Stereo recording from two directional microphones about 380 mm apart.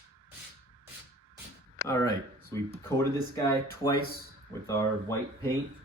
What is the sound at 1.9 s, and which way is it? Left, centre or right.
Speech, centre.